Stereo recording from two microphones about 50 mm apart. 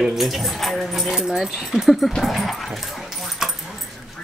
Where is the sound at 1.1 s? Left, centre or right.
Centre.